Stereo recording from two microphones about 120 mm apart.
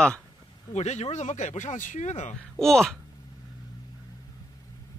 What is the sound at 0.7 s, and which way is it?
Speech, 70° left (ahead or behind).